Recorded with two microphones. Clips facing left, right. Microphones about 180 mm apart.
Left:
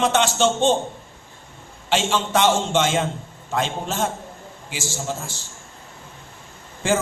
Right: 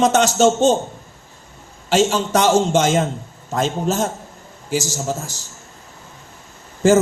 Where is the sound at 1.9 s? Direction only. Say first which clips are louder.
Right 5 dB; 40° right (ahead or behind).